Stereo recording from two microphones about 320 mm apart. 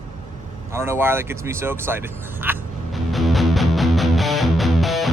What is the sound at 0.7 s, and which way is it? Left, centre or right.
Vehicle, centre.